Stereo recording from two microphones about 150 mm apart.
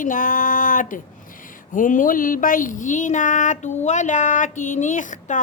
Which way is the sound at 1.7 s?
60° left (ahead or behind).